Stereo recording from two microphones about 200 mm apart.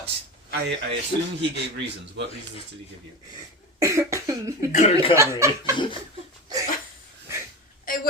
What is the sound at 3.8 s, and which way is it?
Cough, 15° right (ahead or behind).